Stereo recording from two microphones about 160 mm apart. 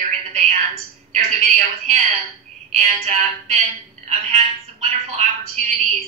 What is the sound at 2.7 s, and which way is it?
A woman's voice, 50° right (ahead or behind).